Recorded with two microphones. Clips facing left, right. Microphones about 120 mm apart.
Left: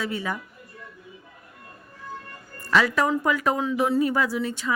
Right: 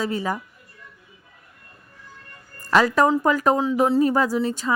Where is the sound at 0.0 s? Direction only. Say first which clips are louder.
Right 4 dB; 35° right (ahead or behind).